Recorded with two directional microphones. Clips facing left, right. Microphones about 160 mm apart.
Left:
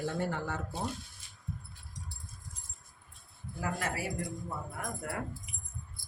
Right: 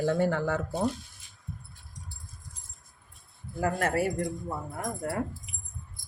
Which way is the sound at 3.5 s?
50° right (ahead or behind).